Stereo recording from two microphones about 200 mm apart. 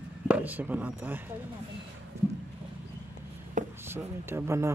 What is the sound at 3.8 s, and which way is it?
Speech, 10° right (ahead or behind).